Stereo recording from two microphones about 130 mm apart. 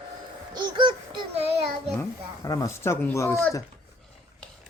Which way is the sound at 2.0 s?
25° left (ahead or behind).